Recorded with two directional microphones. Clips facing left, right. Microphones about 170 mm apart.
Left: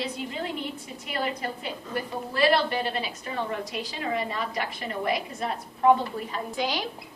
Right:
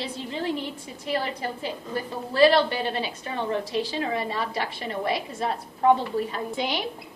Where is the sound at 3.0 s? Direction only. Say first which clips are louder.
Right 1 dB; 30° right (ahead or behind).